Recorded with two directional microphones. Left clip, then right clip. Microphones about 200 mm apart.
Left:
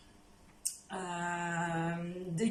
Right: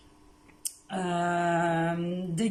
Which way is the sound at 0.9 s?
45° right (ahead or behind).